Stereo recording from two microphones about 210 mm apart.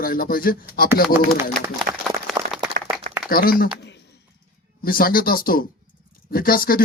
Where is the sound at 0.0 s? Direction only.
45° left (ahead or behind).